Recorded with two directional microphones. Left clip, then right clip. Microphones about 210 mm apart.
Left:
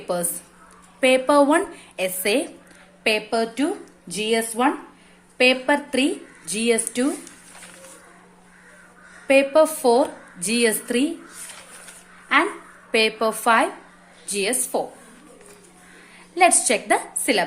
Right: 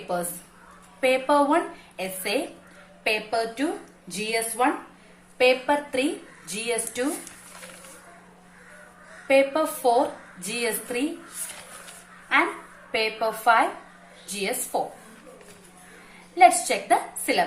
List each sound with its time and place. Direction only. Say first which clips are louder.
0.1 s speech: left 2 dB; 50° left (ahead or behind)
9.2 s speech: left 5 dB; 50° left (ahead or behind)
12.9 s speech: left 5 dB; 50° left (ahead or behind)
14.7 s speech: left 1 dB; 50° left (ahead or behind)
16.3 s speech: even; 50° left (ahead or behind)